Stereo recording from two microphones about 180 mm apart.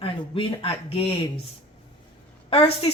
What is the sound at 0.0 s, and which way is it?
A woman's voice, 30° left (ahead or behind).